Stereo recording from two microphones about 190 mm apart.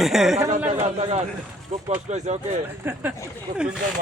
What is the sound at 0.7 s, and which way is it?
A man's voice, 35° right (ahead or behind).